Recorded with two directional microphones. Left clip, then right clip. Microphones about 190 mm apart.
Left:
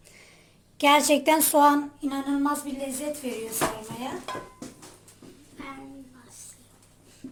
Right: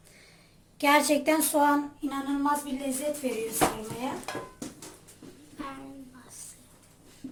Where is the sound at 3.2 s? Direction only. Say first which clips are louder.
Right 2 dB; 50° left (ahead or behind).